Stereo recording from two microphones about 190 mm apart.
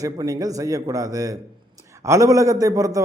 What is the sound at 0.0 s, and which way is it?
Speech, 20° right (ahead or behind).